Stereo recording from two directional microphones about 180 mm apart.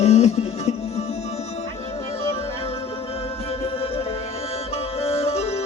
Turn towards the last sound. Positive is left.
turn(degrees=35)  # may be behind; listen again after turning